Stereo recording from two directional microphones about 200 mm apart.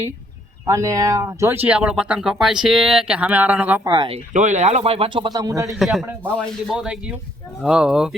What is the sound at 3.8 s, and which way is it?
Speech, 20° right (ahead or behind).